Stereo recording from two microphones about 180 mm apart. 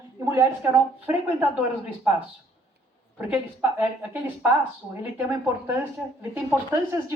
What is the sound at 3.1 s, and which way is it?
Speech, 10° right (ahead or behind).